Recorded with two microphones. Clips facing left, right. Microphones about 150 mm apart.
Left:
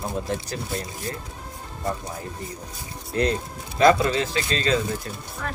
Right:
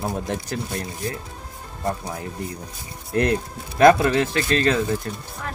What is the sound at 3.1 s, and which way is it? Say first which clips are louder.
Speech: right 3 dB; 60° right (ahead or behind).